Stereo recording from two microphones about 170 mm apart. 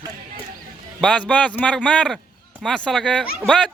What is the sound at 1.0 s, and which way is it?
A man's voice, 5° left (ahead or behind).